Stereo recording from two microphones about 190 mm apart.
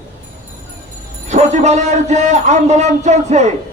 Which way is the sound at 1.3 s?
35° right (ahead or behind).